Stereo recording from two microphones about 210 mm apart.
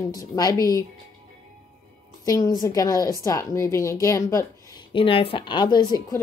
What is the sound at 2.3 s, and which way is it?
A woman's voice, 15° left (ahead or behind).